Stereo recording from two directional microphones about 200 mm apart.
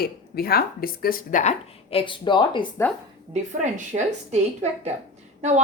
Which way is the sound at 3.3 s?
35° right (ahead or behind).